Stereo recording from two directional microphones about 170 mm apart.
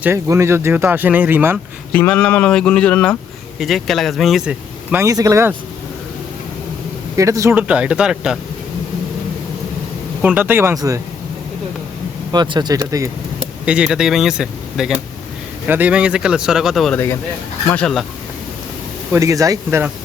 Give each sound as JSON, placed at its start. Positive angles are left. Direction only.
{"t": 0.0, "sound": "speech", "side_deg": -15}
{"t": 1.9, "sound": "speech", "side_deg": 10}
{"t": 7.2, "sound": "speech", "side_deg": -20}
{"t": 7.7, "sound": "speech", "side_deg": -5}
{"t": 10.2, "sound": "speech", "side_deg": -10}
{"t": 12.3, "sound": "speech", "side_deg": -25}
{"t": 13.7, "sound": "speech", "side_deg": -5}
{"t": 19.1, "sound": "speech", "side_deg": -20}